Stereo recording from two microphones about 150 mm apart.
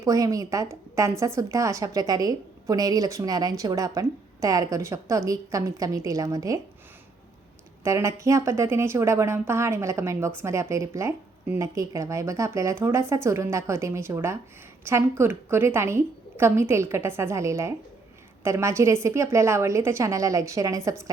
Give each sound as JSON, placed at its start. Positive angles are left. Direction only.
{"t": 0.0, "sound": "a woman's voice", "side_deg": -20}
{"t": 7.9, "sound": "a woman's voice", "side_deg": -20}